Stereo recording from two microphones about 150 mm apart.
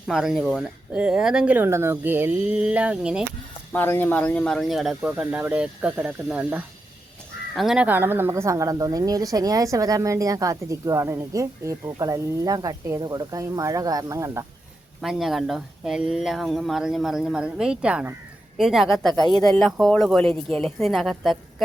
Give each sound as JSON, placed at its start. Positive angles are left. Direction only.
{"t": 0.1, "sound": "speech", "side_deg": -5}
{"t": 3.7, "sound": "a woman's voice", "side_deg": 15}
{"t": 15.0, "sound": "speech", "side_deg": 0}